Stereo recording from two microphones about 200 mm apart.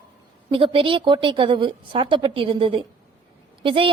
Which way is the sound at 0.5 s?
25° right (ahead or behind).